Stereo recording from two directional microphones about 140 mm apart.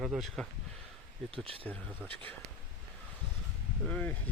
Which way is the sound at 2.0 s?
15° left (ahead or behind).